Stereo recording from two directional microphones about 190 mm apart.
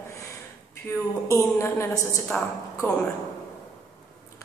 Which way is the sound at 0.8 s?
15° left (ahead or behind).